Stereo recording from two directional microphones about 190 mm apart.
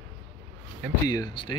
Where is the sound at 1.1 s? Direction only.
20° left (ahead or behind).